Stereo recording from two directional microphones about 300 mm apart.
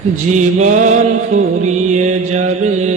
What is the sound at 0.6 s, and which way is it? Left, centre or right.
Mantra, right.